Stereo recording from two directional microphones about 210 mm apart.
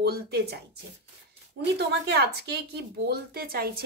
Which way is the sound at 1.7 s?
50° right (ahead or behind).